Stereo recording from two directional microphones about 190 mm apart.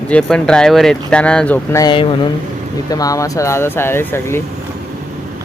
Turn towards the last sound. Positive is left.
turn(degrees=15)  # may be behind; listen again after turning